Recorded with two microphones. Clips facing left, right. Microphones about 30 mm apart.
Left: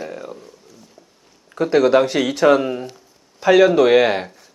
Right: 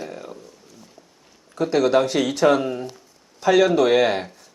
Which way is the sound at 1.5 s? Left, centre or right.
Centre.